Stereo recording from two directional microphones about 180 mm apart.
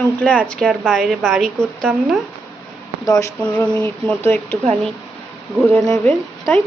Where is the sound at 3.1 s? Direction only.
20° left (ahead or behind).